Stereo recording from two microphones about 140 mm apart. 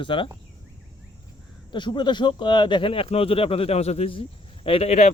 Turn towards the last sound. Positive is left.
turn(degrees=50)  # may be behind; listen again after turning